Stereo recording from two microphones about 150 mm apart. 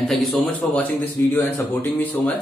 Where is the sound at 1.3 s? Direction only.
20° left (ahead or behind).